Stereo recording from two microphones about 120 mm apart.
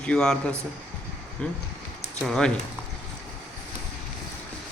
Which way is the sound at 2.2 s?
Centre (ahead or behind).